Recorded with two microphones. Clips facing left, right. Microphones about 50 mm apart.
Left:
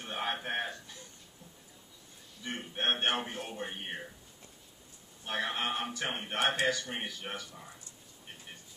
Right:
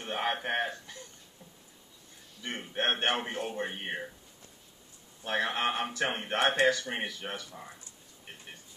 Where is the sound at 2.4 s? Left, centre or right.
Right.